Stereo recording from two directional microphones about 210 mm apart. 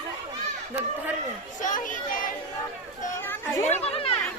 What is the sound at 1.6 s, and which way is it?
Speech, 40° left (ahead or behind).